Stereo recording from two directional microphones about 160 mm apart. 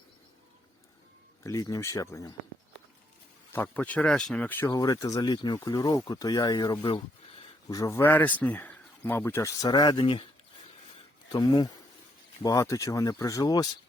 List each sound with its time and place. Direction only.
1.5 s speech: 20° left (ahead or behind)
3.5 s speech: 10° left (ahead or behind); by 10.2 s 30° left (ahead or behind)
11.3 s speech: 25° left (ahead or behind)